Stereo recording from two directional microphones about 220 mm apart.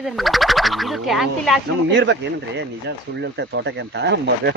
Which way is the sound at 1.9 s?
55° right (ahead or behind).